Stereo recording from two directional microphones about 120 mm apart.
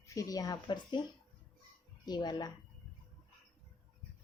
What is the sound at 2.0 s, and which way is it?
Speech, 35° left (ahead or behind).